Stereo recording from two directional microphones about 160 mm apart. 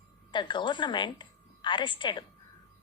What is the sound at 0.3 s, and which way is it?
A woman's voice, 30° left (ahead or behind).